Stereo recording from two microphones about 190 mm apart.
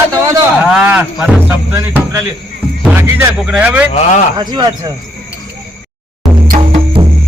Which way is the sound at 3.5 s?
5° right (ahead or behind).